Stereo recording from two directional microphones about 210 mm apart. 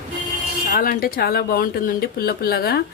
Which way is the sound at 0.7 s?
45° left (ahead or behind).